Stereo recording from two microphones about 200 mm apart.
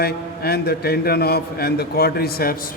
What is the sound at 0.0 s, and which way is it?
A man's voice, 50° left (ahead or behind).